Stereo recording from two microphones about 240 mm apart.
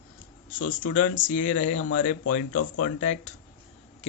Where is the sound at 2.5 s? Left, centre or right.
Left.